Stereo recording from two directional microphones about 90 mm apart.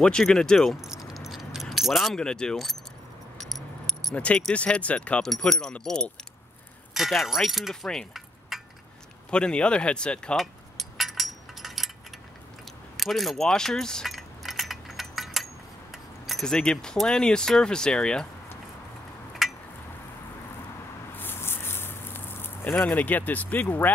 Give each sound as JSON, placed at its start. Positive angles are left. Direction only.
{"t": 0.0, "sound": "speech", "side_deg": 10}
{"t": 3.3, "sound": "keys jangling", "side_deg": 0}
{"t": 4.1, "sound": "speech", "side_deg": 15}
{"t": 6.9, "sound": "speech", "side_deg": 0}
{"t": 10.3, "sound": "cutlery", "side_deg": 0}
{"t": 12.9, "sound": "keys jangling", "side_deg": 0}
{"t": 15.9, "sound": "speech", "side_deg": 0}
{"t": 19.4, "sound": "a sound", "side_deg": -5}
{"t": 21.2, "sound": "a sound", "side_deg": 25}
{"t": 22.9, "sound": "speech", "side_deg": 20}